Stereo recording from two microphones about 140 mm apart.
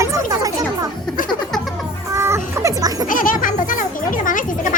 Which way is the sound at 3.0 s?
75° left (ahead or behind).